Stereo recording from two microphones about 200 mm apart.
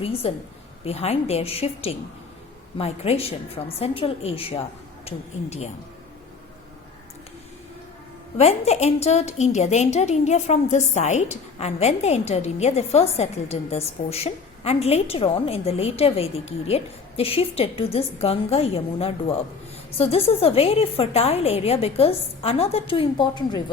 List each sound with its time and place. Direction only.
0.0 s a woman's voice: 30° left (ahead or behind)
8.4 s a woman's voice: 30° left (ahead or behind)